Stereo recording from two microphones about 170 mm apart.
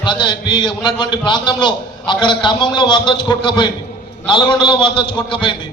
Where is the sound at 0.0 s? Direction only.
25° left (ahead or behind).